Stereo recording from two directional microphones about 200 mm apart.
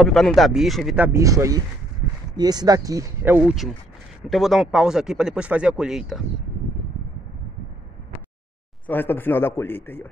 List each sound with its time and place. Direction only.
0.0 s speech: centre (ahead or behind)
8.8 s speech: 10° left (ahead or behind)